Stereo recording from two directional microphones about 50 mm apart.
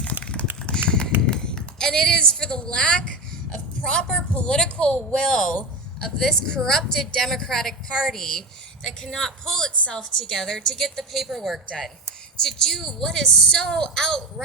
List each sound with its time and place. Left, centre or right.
0.2 s a sound: left
4.1 s a woman's voice: centre
9.7 s a woman's voice: left; by 11.6 s centre
12.4 s a woman's voice: centre